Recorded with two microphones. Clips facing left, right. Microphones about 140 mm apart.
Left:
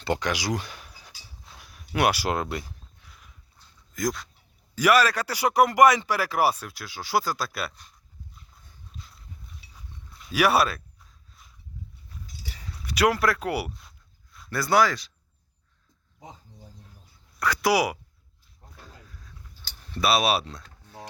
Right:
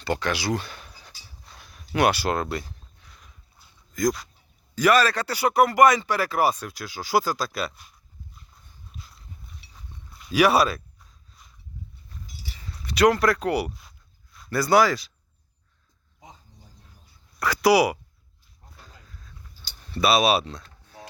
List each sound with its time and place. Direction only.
0.0 s a sound: 15° left (ahead or behind)
3.6 s dog: 10° right (ahead or behind)
3.9 s speech: centre (ahead or behind)
9.0 s dog: centre (ahead or behind)
10.1 s speech: centre (ahead or behind)
12.1 s livestock: 5° left (ahead or behind)
12.7 s speech: 10° left (ahead or behind)
17.4 s speech: centre (ahead or behind)
18.9 s roaring cats: 10° left (ahead or behind)
19.9 s speech: centre (ahead or behind)